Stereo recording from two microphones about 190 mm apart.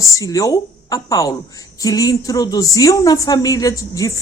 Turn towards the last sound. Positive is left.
turn(degrees=15)  # may be behind; listen again after turning